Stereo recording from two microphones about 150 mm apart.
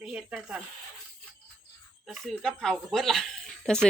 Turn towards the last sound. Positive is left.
turn(degrees=5)  # may be behind; listen again after turning